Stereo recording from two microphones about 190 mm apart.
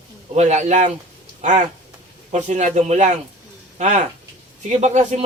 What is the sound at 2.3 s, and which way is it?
Speech, 35° right (ahead or behind).